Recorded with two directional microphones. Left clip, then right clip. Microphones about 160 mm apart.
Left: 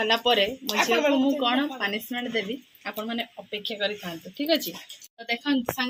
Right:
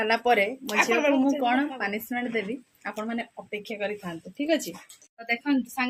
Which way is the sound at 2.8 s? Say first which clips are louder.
Left 1 dB; 20° right (ahead or behind).